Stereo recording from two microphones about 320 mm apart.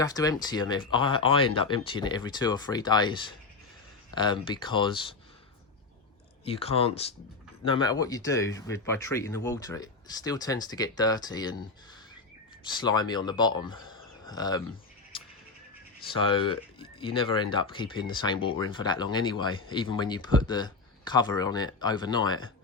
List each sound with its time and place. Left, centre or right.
0.0 s speech: centre
6.4 s speech: centre
12.8 s speech: centre
16.1 s speech: centre